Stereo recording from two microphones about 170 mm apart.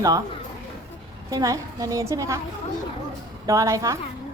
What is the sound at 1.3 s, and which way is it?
A woman's voice, 20° right (ahead or behind).